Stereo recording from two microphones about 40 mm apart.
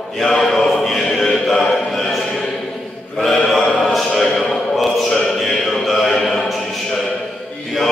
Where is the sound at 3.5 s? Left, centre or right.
Centre.